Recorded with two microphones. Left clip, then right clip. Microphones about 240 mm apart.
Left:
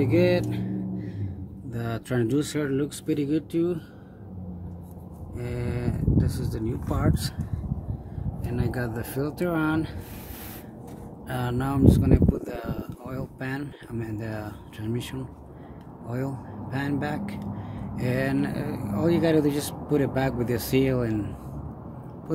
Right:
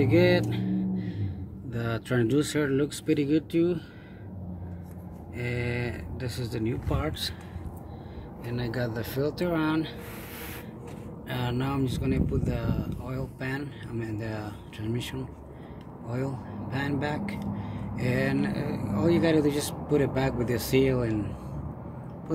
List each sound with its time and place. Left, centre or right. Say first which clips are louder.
0.0 s speech: even; centre
5.4 s speech: right 1 dB; centre
8.5 s speech: left 1 dB; centre
11.2 s speech: left 2 dB; centre